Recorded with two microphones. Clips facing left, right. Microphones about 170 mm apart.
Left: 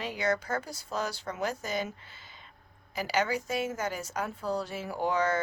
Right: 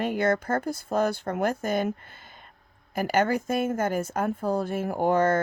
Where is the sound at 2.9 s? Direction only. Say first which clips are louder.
Right 6 dB; 55° right (ahead or behind).